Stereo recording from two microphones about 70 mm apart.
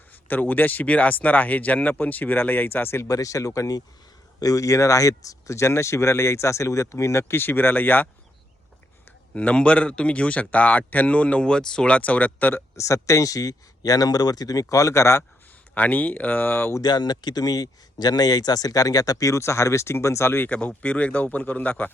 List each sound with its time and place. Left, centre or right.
0.1 s speech: left
3.1 s speech: left
9.3 s speech: centre
12.7 s speech: left
15.7 s speech: left
16.8 s speech: left
20.5 s speech: centre